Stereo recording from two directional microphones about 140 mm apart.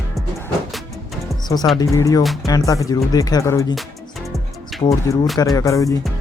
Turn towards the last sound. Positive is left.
turn(degrees=25)  # may be behind; listen again after turning